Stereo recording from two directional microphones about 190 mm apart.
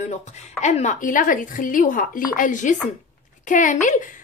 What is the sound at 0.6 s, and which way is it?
A woman's voice, 35° left (ahead or behind).